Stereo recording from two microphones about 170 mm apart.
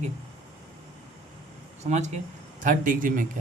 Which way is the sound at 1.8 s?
45° right (ahead or behind).